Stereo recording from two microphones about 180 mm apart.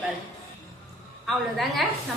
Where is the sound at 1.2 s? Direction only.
Centre (ahead or behind).